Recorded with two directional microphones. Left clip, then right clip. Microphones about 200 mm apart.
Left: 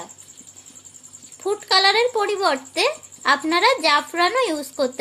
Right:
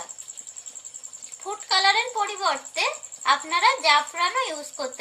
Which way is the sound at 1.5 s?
45° left (ahead or behind).